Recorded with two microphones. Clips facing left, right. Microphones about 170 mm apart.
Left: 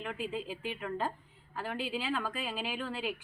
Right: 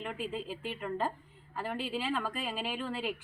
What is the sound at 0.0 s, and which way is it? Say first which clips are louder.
A woman's voice: even; centre (ahead or behind).